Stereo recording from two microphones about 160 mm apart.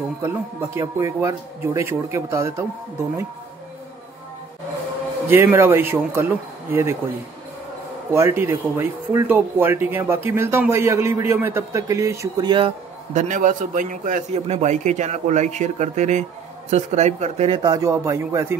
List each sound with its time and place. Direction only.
0.2 s speech: 15° right (ahead or behind)
5.3 s speech: 15° right (ahead or behind)
8.1 s speech: 15° right (ahead or behind)
13.1 s a man's voice: 50° right (ahead or behind)
17.6 s speech: 20° right (ahead or behind)